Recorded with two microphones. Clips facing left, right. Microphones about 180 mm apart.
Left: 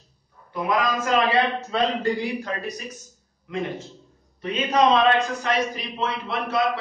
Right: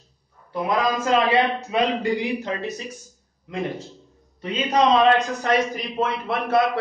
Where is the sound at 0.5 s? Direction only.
30° right (ahead or behind).